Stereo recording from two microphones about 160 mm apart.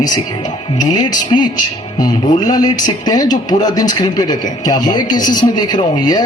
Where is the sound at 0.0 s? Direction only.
25° left (ahead or behind).